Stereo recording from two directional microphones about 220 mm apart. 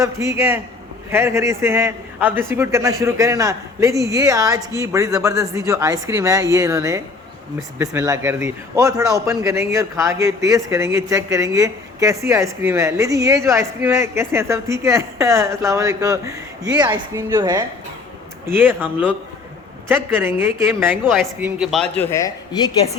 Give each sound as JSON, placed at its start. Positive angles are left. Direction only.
{"t": 0.0, "sound": "a man's voice", "side_deg": -15}
{"t": 21.0, "sound": "speech", "side_deg": 0}
{"t": 22.1, "sound": "speech", "side_deg": 15}